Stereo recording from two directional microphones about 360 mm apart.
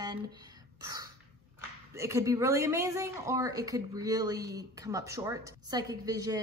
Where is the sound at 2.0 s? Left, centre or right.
Centre.